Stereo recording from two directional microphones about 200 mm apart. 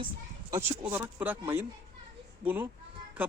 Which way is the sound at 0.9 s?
10° right (ahead or behind).